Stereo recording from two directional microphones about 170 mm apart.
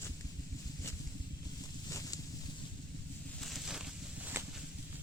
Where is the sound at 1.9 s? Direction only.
20° left (ahead or behind).